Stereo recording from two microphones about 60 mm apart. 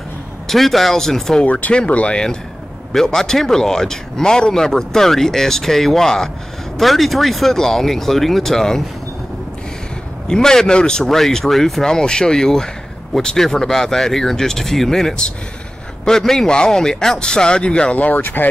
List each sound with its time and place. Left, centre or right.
0.5 s speech: centre
1.4 s speech: left
2.9 s speech: centre
10.2 s speech: centre; by 18.5 s left